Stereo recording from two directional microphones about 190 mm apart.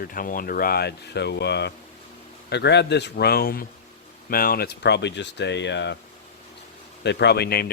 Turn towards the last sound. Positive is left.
turn(degrees=55)  # may be behind; listen again after turning